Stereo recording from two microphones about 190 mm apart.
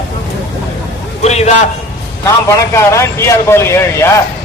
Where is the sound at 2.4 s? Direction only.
15° left (ahead or behind).